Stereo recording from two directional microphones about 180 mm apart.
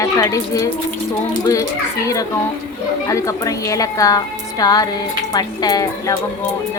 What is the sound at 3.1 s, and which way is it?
A woman's voice, 20° left (ahead or behind).